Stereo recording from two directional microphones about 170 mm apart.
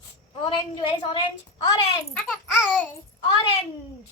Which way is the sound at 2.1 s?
5° left (ahead or behind).